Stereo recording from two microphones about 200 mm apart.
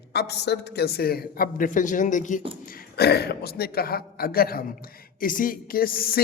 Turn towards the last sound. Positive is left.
turn(degrees=50)  # may be behind; listen again after turning